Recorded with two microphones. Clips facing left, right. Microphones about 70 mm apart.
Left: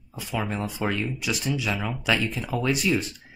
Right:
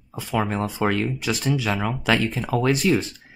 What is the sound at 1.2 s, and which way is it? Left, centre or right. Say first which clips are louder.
Speech: right 4 dB; right.